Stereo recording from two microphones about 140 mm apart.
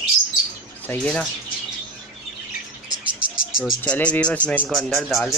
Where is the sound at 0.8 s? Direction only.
10° left (ahead or behind).